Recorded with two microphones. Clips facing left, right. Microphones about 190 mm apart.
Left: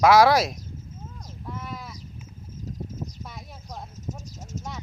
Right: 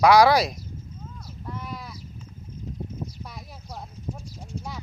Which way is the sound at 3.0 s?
Centre (ahead or behind).